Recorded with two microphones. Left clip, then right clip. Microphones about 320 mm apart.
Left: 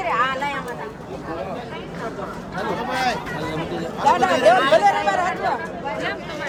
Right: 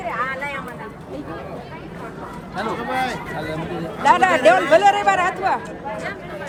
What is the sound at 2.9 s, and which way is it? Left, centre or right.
Speech, centre.